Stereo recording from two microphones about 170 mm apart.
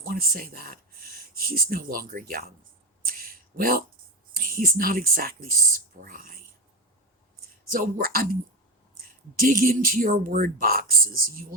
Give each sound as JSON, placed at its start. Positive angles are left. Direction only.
{"t": 0.0, "sound": "speech", "side_deg": -60}
{"t": 3.0, "sound": "a sound", "side_deg": -55}
{"t": 4.4, "sound": "speech", "side_deg": -60}
{"t": 7.7, "sound": "speech", "side_deg": -55}
{"t": 9.4, "sound": "speech", "side_deg": -55}